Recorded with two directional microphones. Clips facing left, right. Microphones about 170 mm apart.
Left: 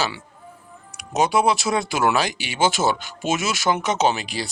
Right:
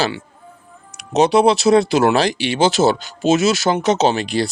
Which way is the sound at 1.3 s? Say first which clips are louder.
Right 9 dB; 30° right (ahead or behind).